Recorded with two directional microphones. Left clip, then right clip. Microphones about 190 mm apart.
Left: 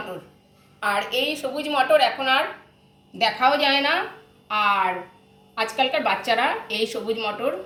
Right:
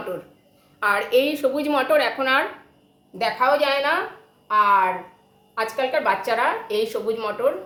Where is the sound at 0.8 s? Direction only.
45° right (ahead or behind).